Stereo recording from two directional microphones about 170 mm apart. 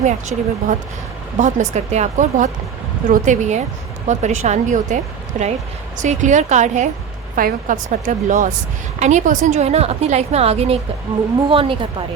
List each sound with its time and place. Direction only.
0.0 s a woman's voice: 45° right (ahead or behind)